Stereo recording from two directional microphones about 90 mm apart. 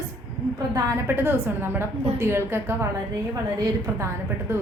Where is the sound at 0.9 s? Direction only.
25° right (ahead or behind).